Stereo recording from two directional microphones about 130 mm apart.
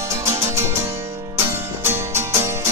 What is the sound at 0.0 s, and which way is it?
Music, 20° right (ahead or behind).